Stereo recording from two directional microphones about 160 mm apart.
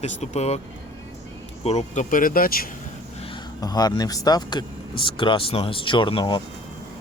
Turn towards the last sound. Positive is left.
turn(degrees=30)  # may be behind; listen again after turning